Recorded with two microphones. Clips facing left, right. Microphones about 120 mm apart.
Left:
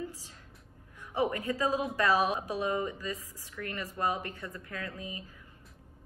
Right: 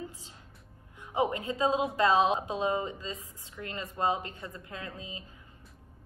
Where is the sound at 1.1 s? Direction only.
20° right (ahead or behind).